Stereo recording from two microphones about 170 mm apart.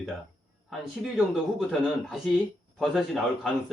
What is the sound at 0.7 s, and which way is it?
Speech, centre (ahead or behind).